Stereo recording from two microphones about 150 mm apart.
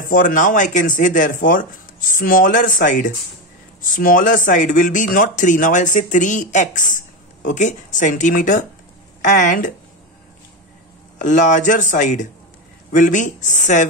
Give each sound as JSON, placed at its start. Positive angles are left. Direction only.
{"t": 0.0, "sound": "speech", "side_deg": 65}
{"t": 11.1, "sound": "speech", "side_deg": 55}